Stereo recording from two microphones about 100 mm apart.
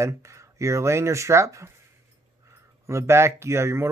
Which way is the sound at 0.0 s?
30° right (ahead or behind).